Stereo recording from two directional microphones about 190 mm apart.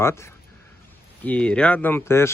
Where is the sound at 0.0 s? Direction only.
15° left (ahead or behind).